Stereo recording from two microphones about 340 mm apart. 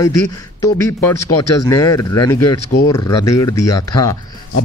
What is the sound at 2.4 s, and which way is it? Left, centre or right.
Speech, left.